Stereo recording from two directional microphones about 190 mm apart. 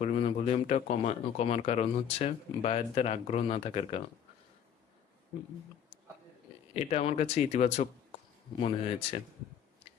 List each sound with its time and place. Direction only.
0.0 s speech: 35° left (ahead or behind)
6.7 s speech: 30° left (ahead or behind)